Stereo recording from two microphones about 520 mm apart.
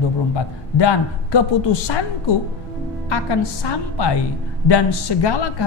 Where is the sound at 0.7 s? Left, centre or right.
Left.